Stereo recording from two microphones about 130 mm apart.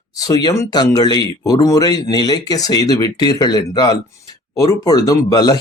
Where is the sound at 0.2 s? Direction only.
30° left (ahead or behind).